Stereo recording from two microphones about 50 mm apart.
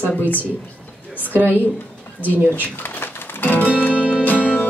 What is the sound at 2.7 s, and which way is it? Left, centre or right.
Music, left.